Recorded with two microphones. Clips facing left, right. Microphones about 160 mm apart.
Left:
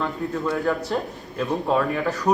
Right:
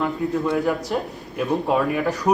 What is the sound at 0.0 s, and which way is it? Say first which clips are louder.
A man's voice: right 3 dB; 20° right (ahead or behind).